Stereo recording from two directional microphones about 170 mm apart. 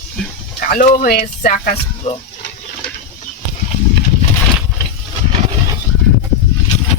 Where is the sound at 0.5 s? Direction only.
55° left (ahead or behind).